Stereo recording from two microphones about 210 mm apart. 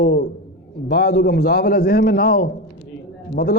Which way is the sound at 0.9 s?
55° left (ahead or behind).